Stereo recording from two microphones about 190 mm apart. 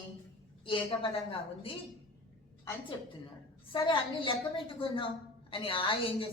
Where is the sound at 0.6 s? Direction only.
25° left (ahead or behind).